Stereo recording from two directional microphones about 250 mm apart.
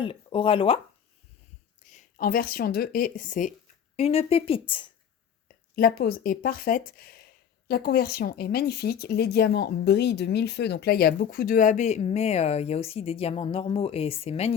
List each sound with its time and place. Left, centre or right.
0.0 s speech: left
1.8 s speech: left
5.7 s speech: left